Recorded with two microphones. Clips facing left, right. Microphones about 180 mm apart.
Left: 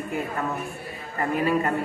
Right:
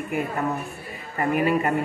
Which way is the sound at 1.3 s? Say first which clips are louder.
Right 1 dB; 15° right (ahead or behind).